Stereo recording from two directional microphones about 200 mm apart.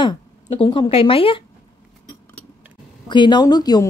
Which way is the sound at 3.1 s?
20° left (ahead or behind).